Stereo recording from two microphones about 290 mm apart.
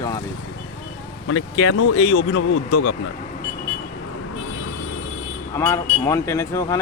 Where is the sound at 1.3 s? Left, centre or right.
Left.